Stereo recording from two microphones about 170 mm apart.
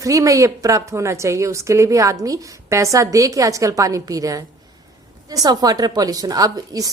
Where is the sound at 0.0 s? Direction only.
20° right (ahead or behind).